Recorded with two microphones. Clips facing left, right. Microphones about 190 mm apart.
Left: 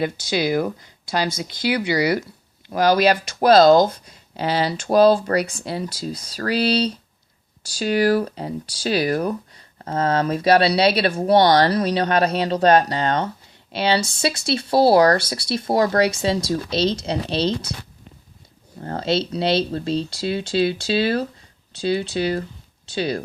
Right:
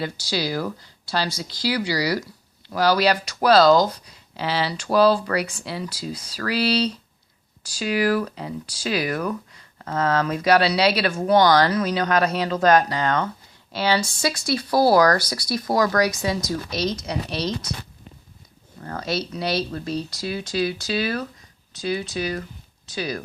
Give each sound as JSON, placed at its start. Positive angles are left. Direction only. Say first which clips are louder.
{"t": 0.0, "sound": "speech", "louder": "left 5 dB", "side_deg": 20}
{"t": 3.1, "sound": "speech", "louder": "left 3 dB", "side_deg": 50}
{"t": 3.6, "sound": "speech", "louder": "left 3 dB", "side_deg": 25}
{"t": 3.9, "sound": "speech", "louder": "left 3 dB", "side_deg": 45}
{"t": 18.8, "sound": "speech", "louder": "left 5 dB", "side_deg": 30}